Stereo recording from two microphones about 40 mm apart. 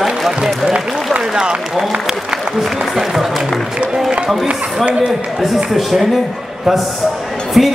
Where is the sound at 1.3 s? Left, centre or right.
Centre.